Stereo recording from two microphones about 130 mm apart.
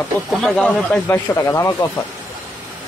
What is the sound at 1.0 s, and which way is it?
Speech, 20° left (ahead or behind).